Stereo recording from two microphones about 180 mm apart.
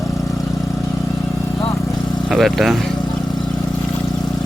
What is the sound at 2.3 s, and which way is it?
Speech, centre (ahead or behind).